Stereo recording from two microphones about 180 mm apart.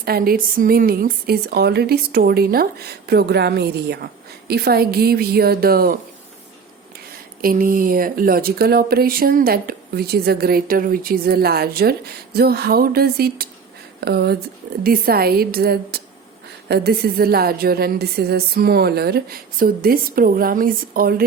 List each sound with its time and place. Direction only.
0.0 s speech: 55° right (ahead or behind)
7.4 s speech: 50° right (ahead or behind)